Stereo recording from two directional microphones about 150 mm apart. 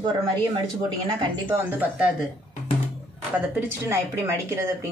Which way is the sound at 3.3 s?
10° right (ahead or behind).